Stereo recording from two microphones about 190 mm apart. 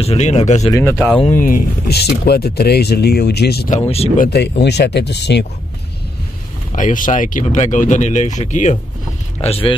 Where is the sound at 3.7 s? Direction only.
35° left (ahead or behind).